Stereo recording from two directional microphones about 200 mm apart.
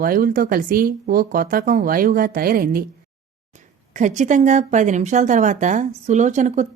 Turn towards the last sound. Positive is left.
turn(degrees=-35)  # may be behind; listen again after turning